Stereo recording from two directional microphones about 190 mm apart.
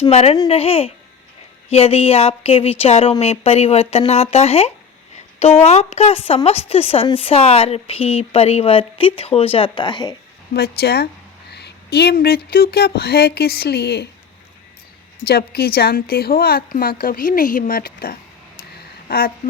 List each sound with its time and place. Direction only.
0.0 s a woman's voice: 35° left (ahead or behind)
10.5 s speech: 60° left (ahead or behind)
15.3 s a woman's voice: 55° left (ahead or behind)